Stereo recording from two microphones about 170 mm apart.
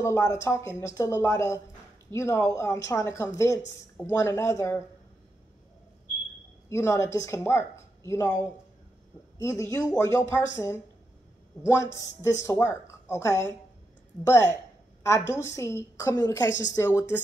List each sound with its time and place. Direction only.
0.0 s speech: 15° left (ahead or behind)
6.7 s a woman's voice: 15° left (ahead or behind)